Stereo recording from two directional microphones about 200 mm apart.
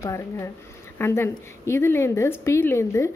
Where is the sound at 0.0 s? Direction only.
15° left (ahead or behind).